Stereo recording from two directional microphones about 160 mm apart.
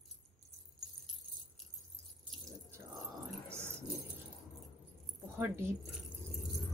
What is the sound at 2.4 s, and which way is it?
Drip, 20° right (ahead or behind).